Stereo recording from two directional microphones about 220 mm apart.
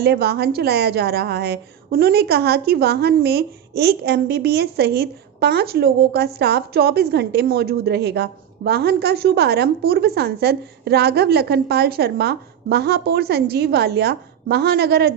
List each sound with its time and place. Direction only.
0.0 s a woman's voice: 45° right (ahead or behind)